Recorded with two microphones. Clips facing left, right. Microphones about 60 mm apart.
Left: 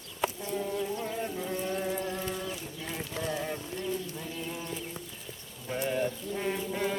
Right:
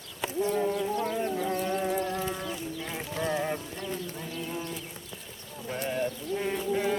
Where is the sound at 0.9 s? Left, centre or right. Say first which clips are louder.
Right 5 dB; right.